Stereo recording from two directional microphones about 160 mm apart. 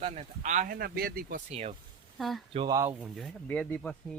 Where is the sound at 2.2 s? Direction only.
Centre (ahead or behind).